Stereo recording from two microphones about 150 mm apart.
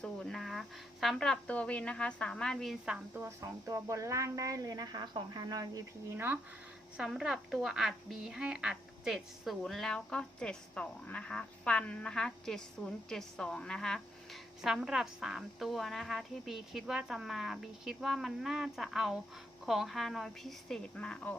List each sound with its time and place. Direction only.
0.0 s speech: 5° left (ahead or behind)
3.2 s speech: 20° right (ahead or behind)
6.9 s speech: centre (ahead or behind)